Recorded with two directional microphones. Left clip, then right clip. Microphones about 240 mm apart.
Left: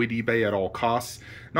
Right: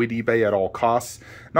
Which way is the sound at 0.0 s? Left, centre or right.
Centre.